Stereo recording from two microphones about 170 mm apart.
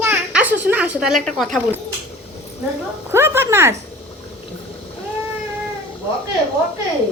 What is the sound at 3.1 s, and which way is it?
Speech, 15° right (ahead or behind).